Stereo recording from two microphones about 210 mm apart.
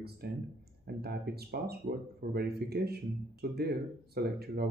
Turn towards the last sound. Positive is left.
turn(degrees=-50)  # may be behind; listen again after turning